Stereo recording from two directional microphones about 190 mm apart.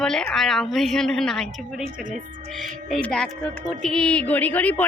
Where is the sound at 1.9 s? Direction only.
45° right (ahead or behind).